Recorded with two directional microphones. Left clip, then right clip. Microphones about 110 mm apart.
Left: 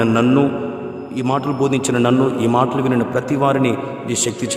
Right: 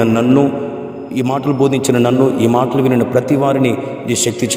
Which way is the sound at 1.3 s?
40° right (ahead or behind).